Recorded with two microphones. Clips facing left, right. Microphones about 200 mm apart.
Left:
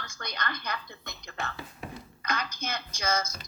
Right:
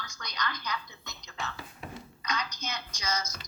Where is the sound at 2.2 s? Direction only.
55° left (ahead or behind).